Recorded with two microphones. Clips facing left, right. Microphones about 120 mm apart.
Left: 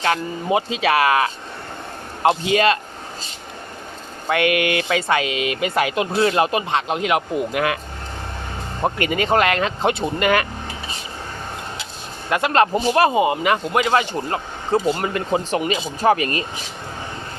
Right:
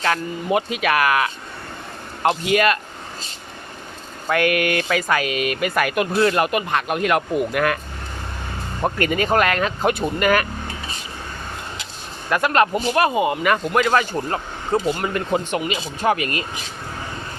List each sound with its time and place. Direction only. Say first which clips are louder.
0.0 s speech: left 1 dB; 25° left (ahead or behind)
4.3 s speech: even; 25° left (ahead or behind)
8.8 s speech: even; 20° left (ahead or behind)
12.3 s speech: left 1 dB; 25° left (ahead or behind)